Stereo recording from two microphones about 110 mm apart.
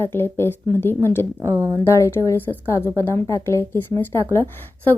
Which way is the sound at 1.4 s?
25° right (ahead or behind).